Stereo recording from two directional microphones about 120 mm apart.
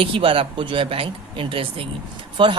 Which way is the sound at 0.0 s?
50° right (ahead or behind).